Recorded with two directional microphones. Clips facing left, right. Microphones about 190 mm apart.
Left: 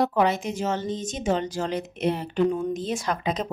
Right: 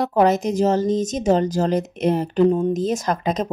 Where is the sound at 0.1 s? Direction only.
40° right (ahead or behind).